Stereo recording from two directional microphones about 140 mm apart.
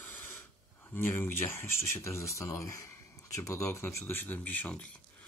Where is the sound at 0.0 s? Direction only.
15° left (ahead or behind).